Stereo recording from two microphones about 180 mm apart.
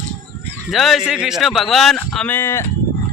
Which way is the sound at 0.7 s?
Centre (ahead or behind).